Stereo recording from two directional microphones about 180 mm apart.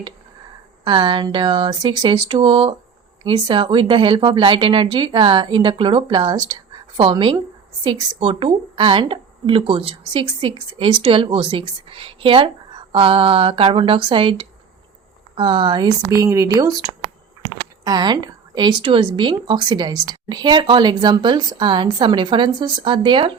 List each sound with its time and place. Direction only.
0.9 s a woman's voice: 25° right (ahead or behind)